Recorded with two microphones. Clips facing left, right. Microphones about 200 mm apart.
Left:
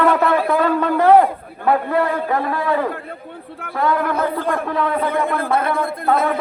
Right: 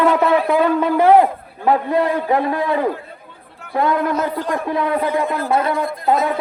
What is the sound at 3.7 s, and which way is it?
Speech, 20° right (ahead or behind).